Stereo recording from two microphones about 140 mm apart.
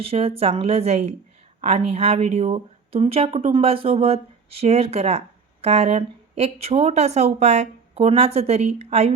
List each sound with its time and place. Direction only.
0.0 s speech: 45° right (ahead or behind)